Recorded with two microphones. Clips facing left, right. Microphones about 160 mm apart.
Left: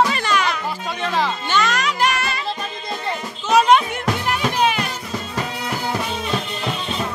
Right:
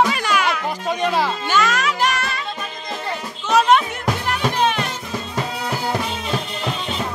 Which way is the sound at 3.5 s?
Centre (ahead or behind).